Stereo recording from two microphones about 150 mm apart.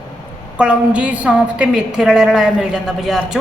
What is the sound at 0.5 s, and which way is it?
A woman's voice, 10° right (ahead or behind).